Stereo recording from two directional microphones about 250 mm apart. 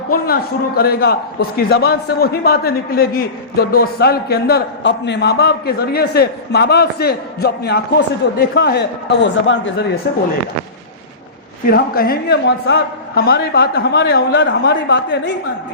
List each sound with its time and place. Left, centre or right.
0.8 s a man's voice: left
11.7 s a man's voice: left